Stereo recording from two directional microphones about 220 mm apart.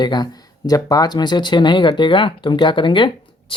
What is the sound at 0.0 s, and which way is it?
Speech, 20° left (ahead or behind).